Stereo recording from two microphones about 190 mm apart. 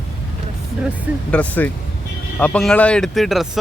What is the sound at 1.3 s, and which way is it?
Speech, 10° left (ahead or behind).